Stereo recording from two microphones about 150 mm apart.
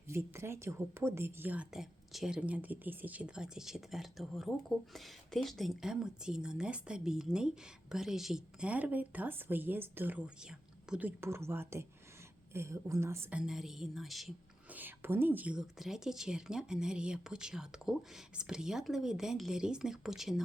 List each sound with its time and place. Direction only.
0.1 s a woman's voice: 15° right (ahead or behind)
13.4 s a woman's voice: 5° right (ahead or behind)
14.7 s a woman's voice: 10° right (ahead or behind)